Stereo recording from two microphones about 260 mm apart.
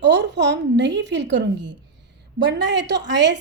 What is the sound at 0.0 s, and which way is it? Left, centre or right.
A woman's voice, right.